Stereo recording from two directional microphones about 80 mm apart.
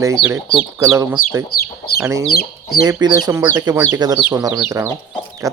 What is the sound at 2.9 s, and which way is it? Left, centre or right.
Speech, right.